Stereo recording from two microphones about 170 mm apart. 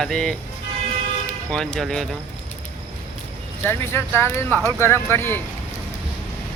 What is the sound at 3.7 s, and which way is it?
Speech, 15° left (ahead or behind).